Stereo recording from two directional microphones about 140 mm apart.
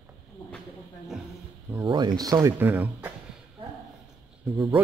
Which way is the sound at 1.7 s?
25° right (ahead or behind).